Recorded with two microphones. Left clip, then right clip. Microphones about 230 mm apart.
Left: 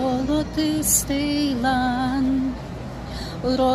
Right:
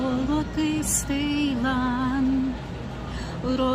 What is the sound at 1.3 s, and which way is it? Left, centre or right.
Music, right.